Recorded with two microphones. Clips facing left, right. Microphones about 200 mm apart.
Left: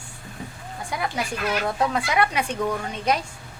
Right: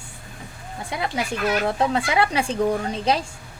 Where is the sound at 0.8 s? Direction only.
25° right (ahead or behind).